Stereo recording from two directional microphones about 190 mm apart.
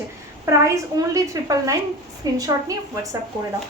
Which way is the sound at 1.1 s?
15° right (ahead or behind).